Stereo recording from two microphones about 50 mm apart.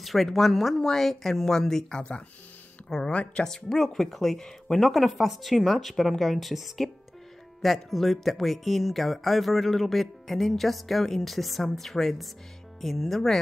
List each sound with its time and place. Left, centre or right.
0.0 s speech: centre; by 3.4 s left
3.4 s speech: centre